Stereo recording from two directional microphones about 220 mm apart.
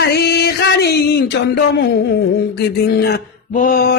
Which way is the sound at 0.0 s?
45° left (ahead or behind).